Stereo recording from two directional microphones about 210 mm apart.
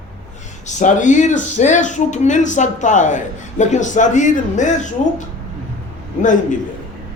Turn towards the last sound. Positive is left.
turn(degrees=35)  # may be behind; listen again after turning